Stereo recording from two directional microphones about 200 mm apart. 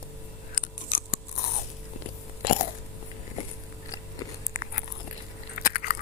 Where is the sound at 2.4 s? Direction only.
40° left (ahead or behind).